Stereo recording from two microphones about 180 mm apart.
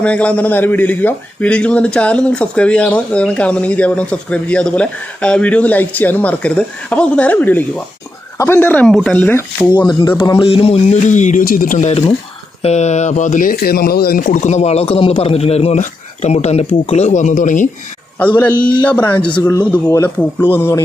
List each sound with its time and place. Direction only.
0.0 s a man's voice: 5° left (ahead or behind)
9.7 s speech: 20° left (ahead or behind); by 17.7 s 45° left (ahead or behind)
18.2 s a man's voice: 10° left (ahead or behind)